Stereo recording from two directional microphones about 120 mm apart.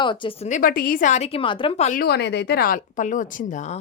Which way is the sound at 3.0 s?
90° left.